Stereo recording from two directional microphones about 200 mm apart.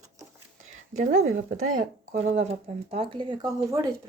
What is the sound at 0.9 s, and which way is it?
Speech, 35° right (ahead or behind).